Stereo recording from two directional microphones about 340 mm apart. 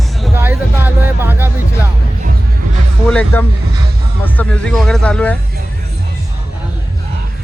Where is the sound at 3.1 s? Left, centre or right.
Centre.